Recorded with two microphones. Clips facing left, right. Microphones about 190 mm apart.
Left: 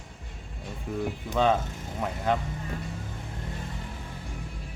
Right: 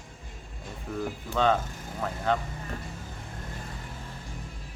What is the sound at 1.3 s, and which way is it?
Speech, 10° left (ahead or behind).